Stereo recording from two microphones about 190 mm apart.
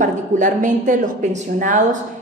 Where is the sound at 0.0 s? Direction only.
45° right (ahead or behind).